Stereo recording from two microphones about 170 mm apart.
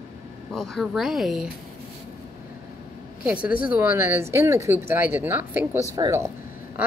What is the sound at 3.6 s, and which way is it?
Speech, 10° right (ahead or behind).